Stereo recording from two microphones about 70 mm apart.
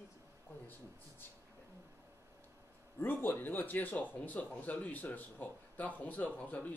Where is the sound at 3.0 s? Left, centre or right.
Left.